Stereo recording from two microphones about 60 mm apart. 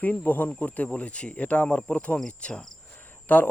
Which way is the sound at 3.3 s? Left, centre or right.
Left.